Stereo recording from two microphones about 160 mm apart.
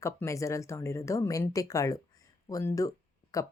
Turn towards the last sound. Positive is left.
turn(degrees=20)  # may be behind; listen again after turning